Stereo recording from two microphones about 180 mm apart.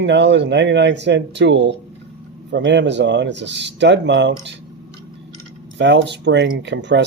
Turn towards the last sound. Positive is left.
turn(degrees=-75)  # may be behind; listen again after turning